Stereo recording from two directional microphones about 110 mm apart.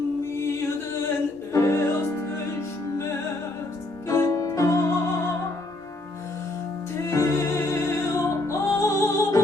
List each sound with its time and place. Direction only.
0.2 s music: 25° left (ahead or behind)
4.1 s music: 30° left (ahead or behind)
7.1 s music: 25° left (ahead or behind)